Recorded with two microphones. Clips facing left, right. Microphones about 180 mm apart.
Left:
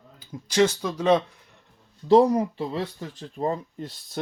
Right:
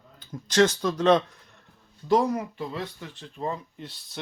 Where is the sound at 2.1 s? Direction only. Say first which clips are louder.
Left 6 dB; 30° left (ahead or behind).